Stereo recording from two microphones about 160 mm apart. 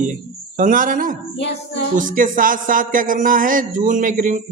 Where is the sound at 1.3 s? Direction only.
90° left.